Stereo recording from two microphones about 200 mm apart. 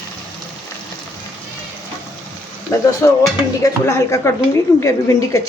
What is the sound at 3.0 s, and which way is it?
A woman's voice, 10° left (ahead or behind).